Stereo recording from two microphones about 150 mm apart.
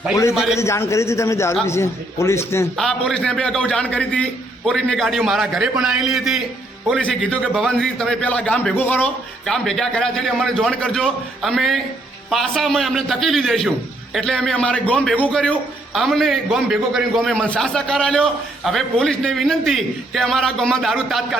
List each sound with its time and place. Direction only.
0.3 s a man's voice: 5° right (ahead or behind)
0.6 s a man's voice: 20° left (ahead or behind)
2.7 s a man's voice: centre (ahead or behind)
7.5 s a man's voice: centre (ahead or behind)